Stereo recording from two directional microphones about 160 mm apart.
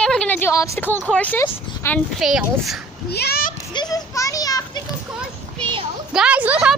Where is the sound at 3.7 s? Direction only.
25° left (ahead or behind).